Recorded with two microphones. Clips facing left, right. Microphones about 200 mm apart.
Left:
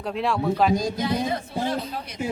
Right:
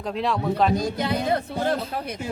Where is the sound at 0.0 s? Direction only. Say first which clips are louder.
Left 1 dB; centre (ahead or behind).